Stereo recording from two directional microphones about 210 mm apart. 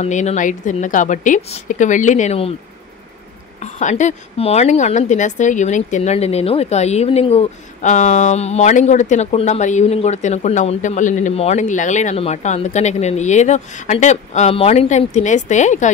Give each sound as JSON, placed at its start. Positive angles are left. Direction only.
{"t": 0.0, "sound": "a woman's voice", "side_deg": 35}
{"t": 3.5, "sound": "a woman's voice", "side_deg": 35}